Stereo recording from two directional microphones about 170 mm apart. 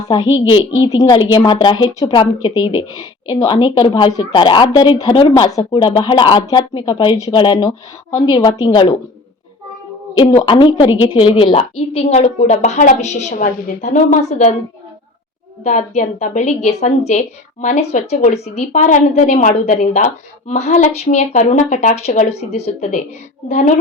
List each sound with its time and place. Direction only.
0.1 s a woman's voice: 25° left (ahead or behind)
10.2 s a woman's voice: 30° left (ahead or behind)
15.6 s a woman's voice: 45° left (ahead or behind)